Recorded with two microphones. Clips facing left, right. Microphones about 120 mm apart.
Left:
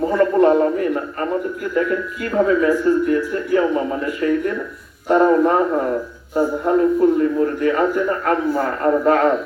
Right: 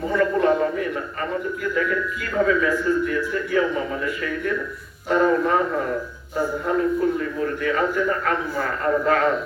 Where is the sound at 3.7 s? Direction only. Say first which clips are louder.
Left 5 dB; 25° left (ahead or behind).